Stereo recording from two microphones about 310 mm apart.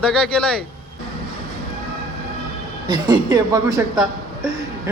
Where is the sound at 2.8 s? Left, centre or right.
Centre.